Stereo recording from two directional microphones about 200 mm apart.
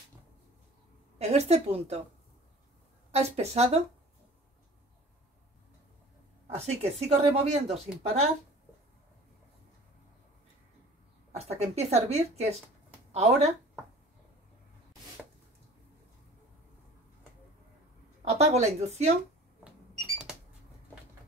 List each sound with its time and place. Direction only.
1.1 s speech: 30° right (ahead or behind)
3.1 s speech: 35° right (ahead or behind)
6.4 s speech: 30° right (ahead or behind)
11.3 s speech: 30° right (ahead or behind)
18.4 s speech: 35° right (ahead or behind)
20.3 s a sound: 5° right (ahead or behind)